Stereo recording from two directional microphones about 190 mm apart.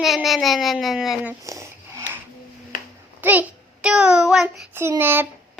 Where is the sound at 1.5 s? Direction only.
15° right (ahead or behind).